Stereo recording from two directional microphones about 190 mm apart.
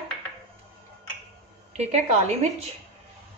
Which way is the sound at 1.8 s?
35° right (ahead or behind).